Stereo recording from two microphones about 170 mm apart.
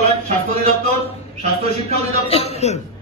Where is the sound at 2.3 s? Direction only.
35° left (ahead or behind).